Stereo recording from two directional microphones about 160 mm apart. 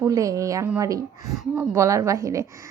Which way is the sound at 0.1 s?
20° right (ahead or behind).